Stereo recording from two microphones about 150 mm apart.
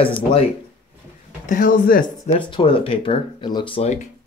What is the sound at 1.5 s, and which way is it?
Speech, 70° left (ahead or behind).